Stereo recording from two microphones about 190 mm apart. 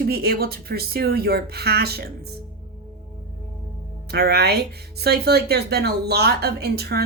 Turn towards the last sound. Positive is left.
turn(degrees=-55)  # may be behind; listen again after turning